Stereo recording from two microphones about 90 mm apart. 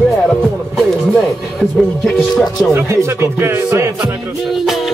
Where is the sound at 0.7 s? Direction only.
5° left (ahead or behind).